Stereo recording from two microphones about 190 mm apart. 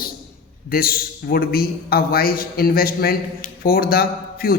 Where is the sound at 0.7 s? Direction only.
50° left (ahead or behind).